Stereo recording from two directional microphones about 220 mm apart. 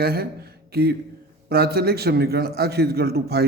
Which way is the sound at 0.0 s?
45° right (ahead or behind).